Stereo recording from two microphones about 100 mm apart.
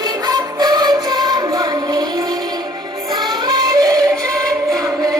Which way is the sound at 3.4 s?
40° right (ahead or behind).